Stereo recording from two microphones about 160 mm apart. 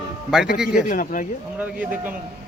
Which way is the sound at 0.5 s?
5° right (ahead or behind).